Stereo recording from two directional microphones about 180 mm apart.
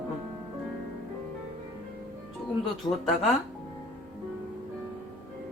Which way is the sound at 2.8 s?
25° left (ahead or behind).